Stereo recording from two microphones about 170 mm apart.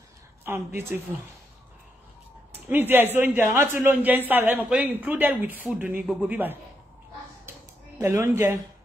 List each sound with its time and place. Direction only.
0.5 s a man's voice: 15° right (ahead or behind)
2.6 s a man's voice: 10° right (ahead or behind)
7.5 s a sound: 15° right (ahead or behind)
8.0 s a man's voice: 15° right (ahead or behind)